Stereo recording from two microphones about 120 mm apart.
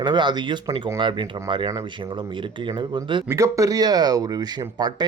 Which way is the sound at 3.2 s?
25° right (ahead or behind).